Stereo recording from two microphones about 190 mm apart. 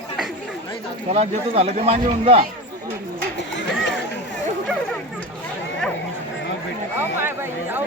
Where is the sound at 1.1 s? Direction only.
35° right (ahead or behind).